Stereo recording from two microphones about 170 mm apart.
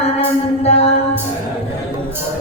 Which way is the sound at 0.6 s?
35° left (ahead or behind).